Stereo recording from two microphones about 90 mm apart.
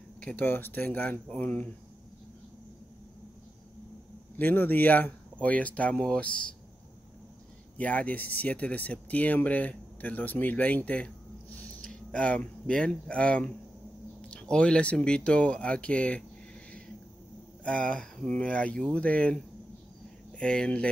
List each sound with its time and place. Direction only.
0.2 s speech: 15° left (ahead or behind)
4.4 s speech: 20° left (ahead or behind)
7.7 s speech: 15° left (ahead or behind)
10.9 s a sound: 15° left (ahead or behind)
11.8 s speech: 10° left (ahead or behind)
17.6 s speech: 15° left (ahead or behind)